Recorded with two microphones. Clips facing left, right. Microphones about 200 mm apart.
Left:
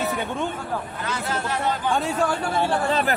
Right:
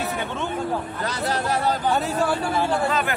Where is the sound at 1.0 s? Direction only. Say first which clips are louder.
Right 4 dB; 35° right (ahead or behind).